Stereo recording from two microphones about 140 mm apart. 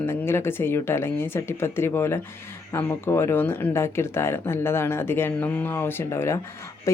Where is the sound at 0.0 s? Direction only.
15° left (ahead or behind).